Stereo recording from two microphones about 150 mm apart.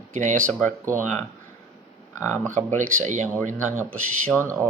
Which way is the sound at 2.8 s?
60° right (ahead or behind).